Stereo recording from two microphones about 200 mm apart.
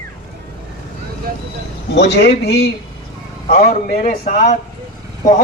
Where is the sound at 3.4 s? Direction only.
45° left (ahead or behind).